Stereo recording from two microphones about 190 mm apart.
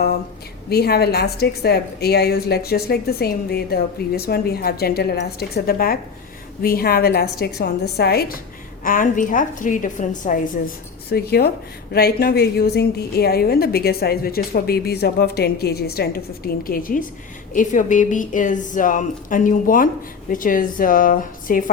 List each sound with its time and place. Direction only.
0.7 s a woman's voice: 55° left (ahead or behind)
11.1 s a woman's voice: 55° left (ahead or behind)